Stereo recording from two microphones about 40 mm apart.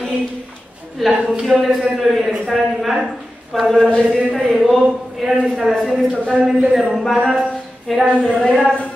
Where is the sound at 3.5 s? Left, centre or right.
Centre.